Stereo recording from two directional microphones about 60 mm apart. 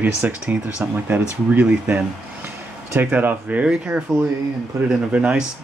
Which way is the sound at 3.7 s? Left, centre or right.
Centre.